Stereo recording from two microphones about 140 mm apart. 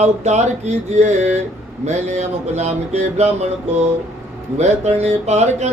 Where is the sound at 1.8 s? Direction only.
55° right (ahead or behind).